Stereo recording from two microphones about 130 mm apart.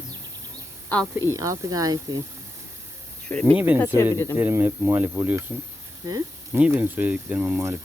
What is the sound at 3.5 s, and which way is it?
Speech, 10° right (ahead or behind).